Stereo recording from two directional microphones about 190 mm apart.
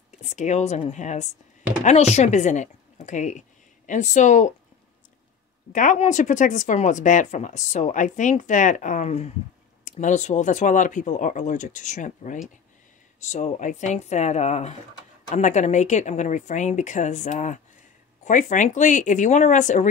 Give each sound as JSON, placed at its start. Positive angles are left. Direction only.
{"t": 0.2, "sound": "speech", "side_deg": 35}
{"t": 5.7, "sound": "speech", "side_deg": 40}